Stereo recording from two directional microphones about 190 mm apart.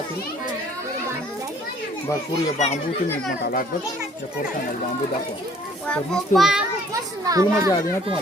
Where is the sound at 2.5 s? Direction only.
40° left (ahead or behind).